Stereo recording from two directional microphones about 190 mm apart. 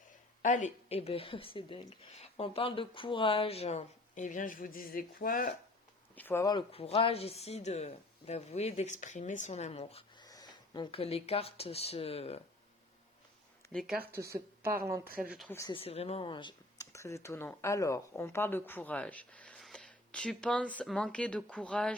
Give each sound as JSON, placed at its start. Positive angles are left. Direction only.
{"t": 0.4, "sound": "speech", "side_deg": 40}
{"t": 6.1, "sound": "speech", "side_deg": 10}
{"t": 10.2, "sound": "speech", "side_deg": 20}
{"t": 13.7, "sound": "speech", "side_deg": -5}
{"t": 14.2, "sound": "speech", "side_deg": -15}
{"t": 15.2, "sound": "speech", "side_deg": -5}
{"t": 15.4, "sound": "speech", "side_deg": 15}
{"t": 15.7, "sound": "speech", "side_deg": 30}